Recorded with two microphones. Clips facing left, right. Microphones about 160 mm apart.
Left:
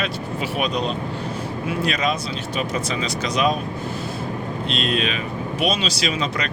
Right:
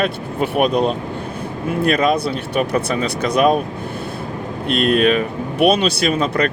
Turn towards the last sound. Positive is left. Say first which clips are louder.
# right 7 dB
turn(degrees=-55)  # may be behind; listen again after turning